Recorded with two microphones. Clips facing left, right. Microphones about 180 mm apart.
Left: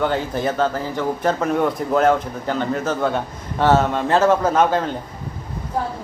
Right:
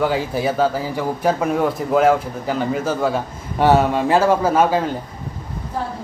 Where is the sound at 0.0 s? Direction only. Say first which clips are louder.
Right 1 dB; 5° right (ahead or behind).